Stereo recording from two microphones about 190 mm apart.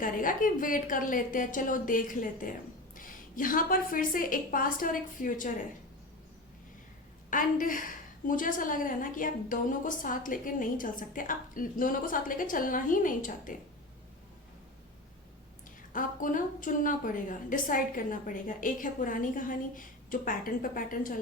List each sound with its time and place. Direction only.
0.0 s a woman's voice: 45° left (ahead or behind)
7.3 s a woman's voice: 45° left (ahead or behind)
15.9 s a woman's voice: 45° left (ahead or behind)